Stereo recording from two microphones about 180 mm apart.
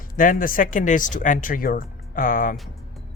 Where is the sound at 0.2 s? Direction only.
50° left (ahead or behind).